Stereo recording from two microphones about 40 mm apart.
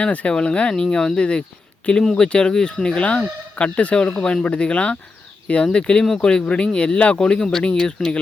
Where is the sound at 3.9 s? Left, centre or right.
Centre.